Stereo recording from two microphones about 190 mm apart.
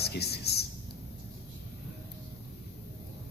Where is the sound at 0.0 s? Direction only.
60° left (ahead or behind).